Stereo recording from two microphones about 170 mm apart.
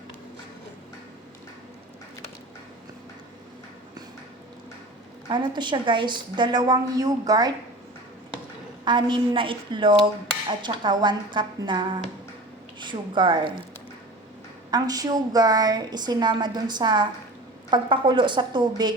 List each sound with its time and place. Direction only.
5.3 s a woman's voice: 25° right (ahead or behind)
8.8 s a woman's voice: 25° right (ahead or behind)
12.8 s speech: 30° right (ahead or behind)
14.7 s a woman's voice: 20° right (ahead or behind)